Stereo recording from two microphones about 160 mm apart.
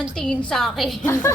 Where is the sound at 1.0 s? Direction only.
15° left (ahead or behind).